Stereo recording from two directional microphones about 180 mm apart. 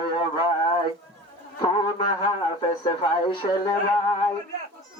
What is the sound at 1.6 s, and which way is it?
A man's voice, 25° left (ahead or behind).